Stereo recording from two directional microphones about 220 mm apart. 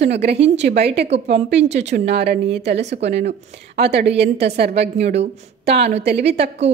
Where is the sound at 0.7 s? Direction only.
50° right (ahead or behind).